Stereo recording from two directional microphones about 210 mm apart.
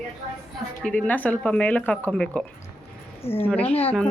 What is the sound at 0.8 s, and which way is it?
Speech, 5° left (ahead or behind).